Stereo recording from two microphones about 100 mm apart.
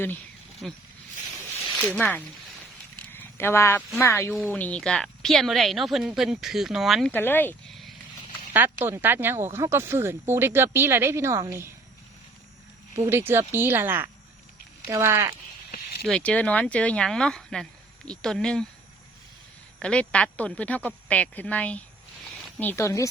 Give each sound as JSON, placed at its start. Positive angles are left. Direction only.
{"t": 0.6, "sound": "a woman's voice", "side_deg": 0}
{"t": 1.8, "sound": "speech", "side_deg": 15}
{"t": 3.1, "sound": "a sound", "side_deg": 20}
{"t": 4.0, "sound": "speech", "side_deg": 25}
{"t": 4.4, "sound": "a woman's voice", "side_deg": 15}
{"t": 7.1, "sound": "speech", "side_deg": 20}
{"t": 7.7, "sound": "a sound", "side_deg": 0}
{"t": 8.5, "sound": "speech", "side_deg": -20}
{"t": 13.1, "sound": "speech", "side_deg": -25}
{"t": 16.0, "sound": "speech", "side_deg": 10}
{"t": 19.8, "sound": "speech", "side_deg": 10}
{"t": 22.7, "sound": "speech", "side_deg": 30}